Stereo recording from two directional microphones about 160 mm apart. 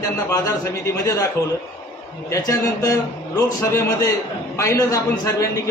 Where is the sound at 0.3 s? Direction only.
20° left (ahead or behind).